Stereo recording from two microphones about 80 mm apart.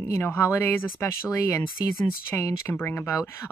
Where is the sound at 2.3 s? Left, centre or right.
Left.